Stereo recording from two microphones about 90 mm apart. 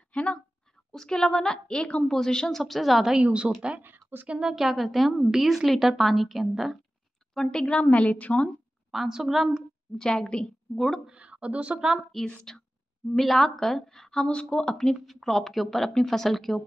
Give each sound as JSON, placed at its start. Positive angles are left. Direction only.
{"t": 0.1, "sound": "a sound", "side_deg": 15}
{"t": 0.9, "sound": "a woman's voice", "side_deg": 5}
{"t": 4.4, "sound": "a woman's voice", "side_deg": -5}
{"t": 8.9, "sound": "speech", "side_deg": -5}
{"t": 9.9, "sound": "a woman's voice", "side_deg": 10}
{"t": 11.1, "sound": "speech", "side_deg": -10}